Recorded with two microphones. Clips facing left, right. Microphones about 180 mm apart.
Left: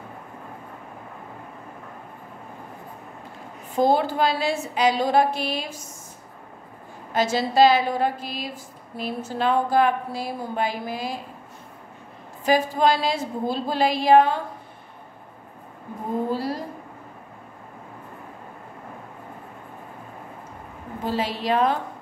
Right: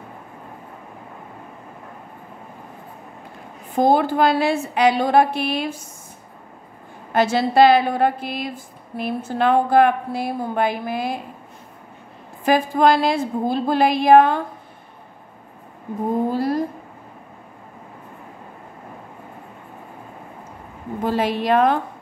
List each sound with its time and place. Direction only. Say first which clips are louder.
3.7 s a woman's voice: right 3 dB; 55° right (ahead or behind)
7.1 s a woman's voice: right 4 dB; 60° right (ahead or behind)
12.4 s a woman's voice: right 3 dB; 55° right (ahead or behind)
16.3 s a sound: right 5 dB; 50° right (ahead or behind)
21.0 s a woman's voice: right 5 dB; 55° right (ahead or behind)